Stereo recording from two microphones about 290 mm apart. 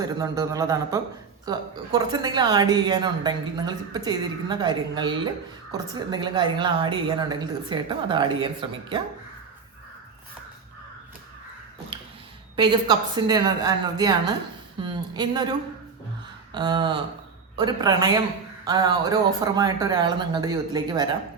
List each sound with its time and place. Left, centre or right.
0.0 s a woman's voice: centre
11.9 s a sound: centre
12.5 s a woman's voice: centre
16.5 s a woman's voice: centre